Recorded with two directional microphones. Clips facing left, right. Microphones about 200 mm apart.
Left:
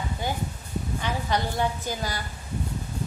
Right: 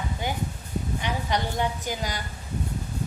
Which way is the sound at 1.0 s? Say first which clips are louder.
Left 1 dB; 15° right (ahead or behind).